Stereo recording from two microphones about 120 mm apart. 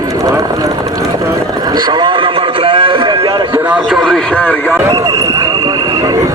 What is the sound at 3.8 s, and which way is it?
Radio, centre (ahead or behind).